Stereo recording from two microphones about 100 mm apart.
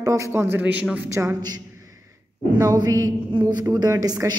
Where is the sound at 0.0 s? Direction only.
30° right (ahead or behind).